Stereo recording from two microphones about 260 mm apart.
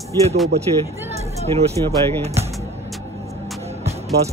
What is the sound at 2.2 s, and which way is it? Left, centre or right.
Speech, right.